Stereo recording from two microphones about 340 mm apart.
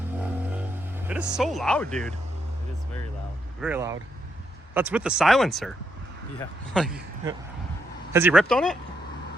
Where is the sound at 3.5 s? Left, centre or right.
Centre.